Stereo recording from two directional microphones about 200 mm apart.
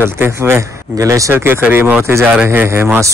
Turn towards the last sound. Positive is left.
turn(degrees=-10)  # may be behind; listen again after turning